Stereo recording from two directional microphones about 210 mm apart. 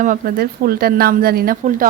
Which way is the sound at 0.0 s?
40° right (ahead or behind).